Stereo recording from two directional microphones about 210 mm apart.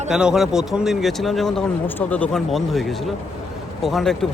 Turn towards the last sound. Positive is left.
turn(degrees=0)  # may be behind; listen again after turning